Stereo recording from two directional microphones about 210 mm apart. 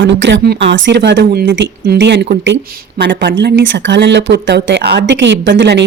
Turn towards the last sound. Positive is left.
turn(degrees=-55)  # may be behind; listen again after turning